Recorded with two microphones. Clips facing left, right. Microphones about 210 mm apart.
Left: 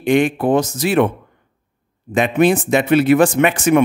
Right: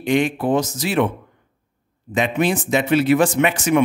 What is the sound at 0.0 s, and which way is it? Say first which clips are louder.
Speech: left 4 dB; 55° left (ahead or behind).